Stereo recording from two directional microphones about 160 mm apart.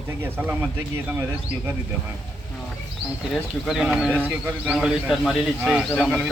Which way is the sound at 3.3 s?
Centre (ahead or behind).